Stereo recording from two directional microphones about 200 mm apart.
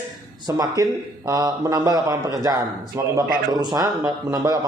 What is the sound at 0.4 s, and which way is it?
A man's voice, 15° right (ahead or behind).